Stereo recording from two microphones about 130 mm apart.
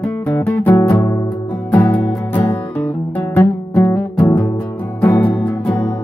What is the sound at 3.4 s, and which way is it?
Music, 20° left (ahead or behind).